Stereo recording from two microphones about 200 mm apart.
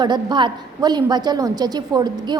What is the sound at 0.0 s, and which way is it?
A woman's voice, 20° right (ahead or behind).